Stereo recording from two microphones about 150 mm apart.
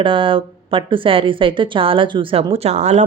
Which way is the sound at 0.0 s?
35° right (ahead or behind).